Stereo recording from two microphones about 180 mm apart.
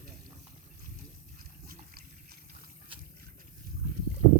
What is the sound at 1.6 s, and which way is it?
Liquid, 60° right (ahead or behind).